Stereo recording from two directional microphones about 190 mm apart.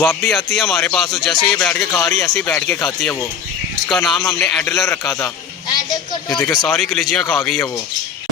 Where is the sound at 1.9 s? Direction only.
15° left (ahead or behind).